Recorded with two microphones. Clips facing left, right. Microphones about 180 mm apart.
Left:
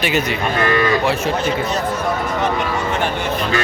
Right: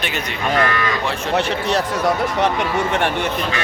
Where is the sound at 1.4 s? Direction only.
75° right (ahead or behind).